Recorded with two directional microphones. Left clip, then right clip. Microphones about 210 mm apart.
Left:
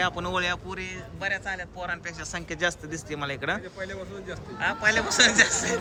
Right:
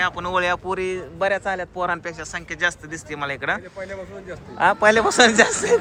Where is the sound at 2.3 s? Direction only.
15° left (ahead or behind).